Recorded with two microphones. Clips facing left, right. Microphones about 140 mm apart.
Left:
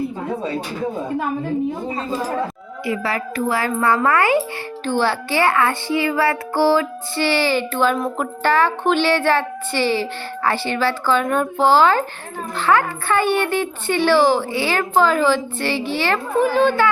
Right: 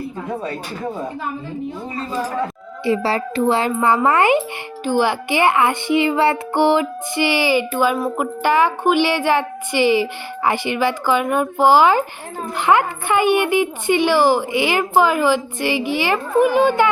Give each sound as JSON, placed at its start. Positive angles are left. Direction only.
{"t": 2.8, "sound": "a child's voice", "side_deg": -30}